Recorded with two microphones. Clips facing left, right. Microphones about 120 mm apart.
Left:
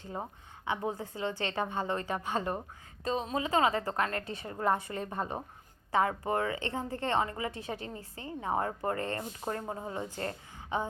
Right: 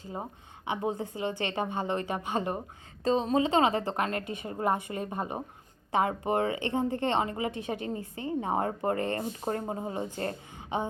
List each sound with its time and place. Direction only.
0.0 s a woman's voice: 10° right (ahead or behind)
3.0 s speech: 30° right (ahead or behind)